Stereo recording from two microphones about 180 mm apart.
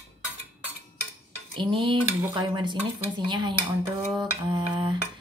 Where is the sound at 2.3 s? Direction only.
25° right (ahead or behind).